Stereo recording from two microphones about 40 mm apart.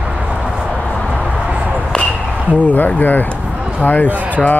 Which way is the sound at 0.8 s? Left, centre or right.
Left.